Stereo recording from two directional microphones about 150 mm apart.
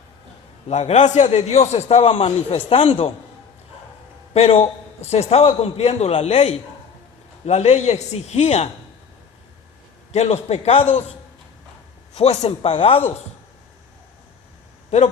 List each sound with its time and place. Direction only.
0.7 s a man's voice: 50° left (ahead or behind)
4.4 s a man's voice: 40° left (ahead or behind)
10.1 s a man's voice: 45° left (ahead or behind)
14.8 s speech: 45° left (ahead or behind)